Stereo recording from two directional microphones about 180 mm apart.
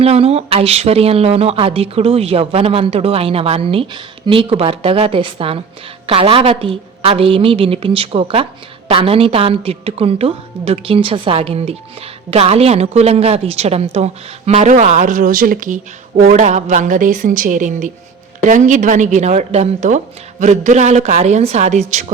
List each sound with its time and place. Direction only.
0.0 s speech: 35° right (ahead or behind)